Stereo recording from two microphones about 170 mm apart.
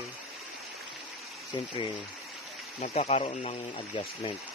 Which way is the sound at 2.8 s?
35° left (ahead or behind).